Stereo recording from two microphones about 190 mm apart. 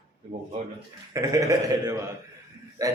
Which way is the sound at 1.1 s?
15° right (ahead or behind).